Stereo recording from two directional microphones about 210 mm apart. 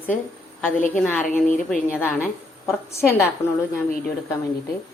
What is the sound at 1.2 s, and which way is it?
Speech, 40° left (ahead or behind).